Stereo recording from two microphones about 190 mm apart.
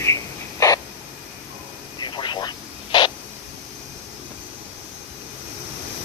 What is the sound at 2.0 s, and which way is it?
Vehicle, 25° left (ahead or behind).